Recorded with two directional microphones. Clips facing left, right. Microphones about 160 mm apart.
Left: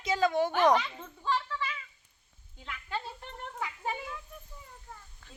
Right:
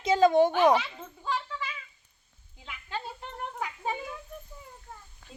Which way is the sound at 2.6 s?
15° right (ahead or behind).